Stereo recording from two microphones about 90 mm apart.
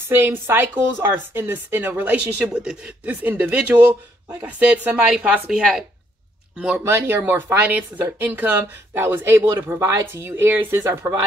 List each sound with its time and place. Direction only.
0.1 s a woman's voice: 25° right (ahead or behind)
5.5 s speech: 5° right (ahead or behind)
6.8 s a woman's voice: 30° right (ahead or behind)